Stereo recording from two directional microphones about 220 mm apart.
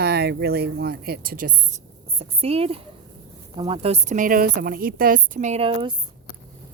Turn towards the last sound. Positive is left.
turn(degrees=-25)  # may be behind; listen again after turning